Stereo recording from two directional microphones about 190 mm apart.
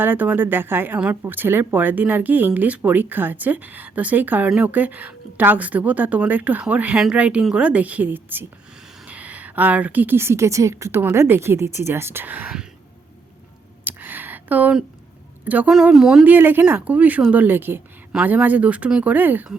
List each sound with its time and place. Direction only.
0.0 s a woman's voice: 10° right (ahead or behind)
13.8 s a sound: 10° right (ahead or behind)
15.4 s a woman's voice: 10° right (ahead or behind)